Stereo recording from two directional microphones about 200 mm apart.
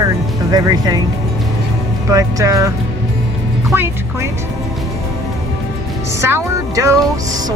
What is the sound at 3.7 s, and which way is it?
Speech, 10° right (ahead or behind).